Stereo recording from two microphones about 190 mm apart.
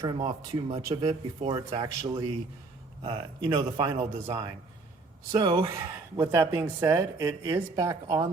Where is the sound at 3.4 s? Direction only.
25° right (ahead or behind).